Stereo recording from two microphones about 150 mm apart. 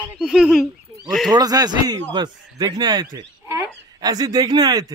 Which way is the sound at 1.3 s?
25° right (ahead or behind).